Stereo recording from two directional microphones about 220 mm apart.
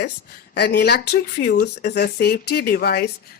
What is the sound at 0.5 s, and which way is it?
Speech, 50° left (ahead or behind).